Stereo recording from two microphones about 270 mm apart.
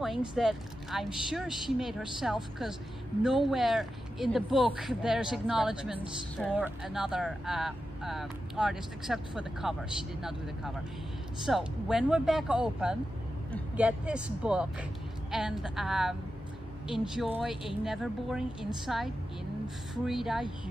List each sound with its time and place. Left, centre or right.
0.0 s speech: centre
20.1 s speech: centre